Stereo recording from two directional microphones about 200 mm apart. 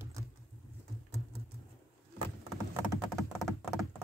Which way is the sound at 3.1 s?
Centre (ahead or behind).